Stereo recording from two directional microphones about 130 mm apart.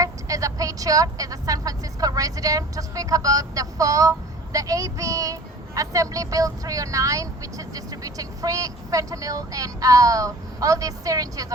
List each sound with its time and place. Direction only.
0.0 s speech: 25° right (ahead or behind)